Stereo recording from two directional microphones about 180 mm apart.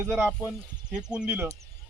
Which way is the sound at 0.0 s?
10° right (ahead or behind).